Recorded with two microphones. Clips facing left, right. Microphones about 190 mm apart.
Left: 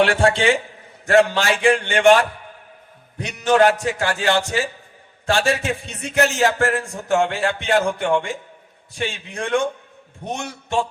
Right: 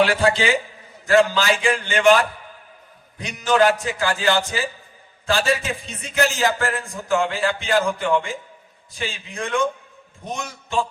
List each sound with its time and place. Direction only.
0.2 s a man's voice: 60° left (ahead or behind)
3.2 s a man's voice: 65° left (ahead or behind)